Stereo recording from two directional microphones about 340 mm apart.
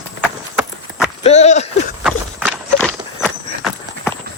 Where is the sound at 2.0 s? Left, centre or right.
Centre.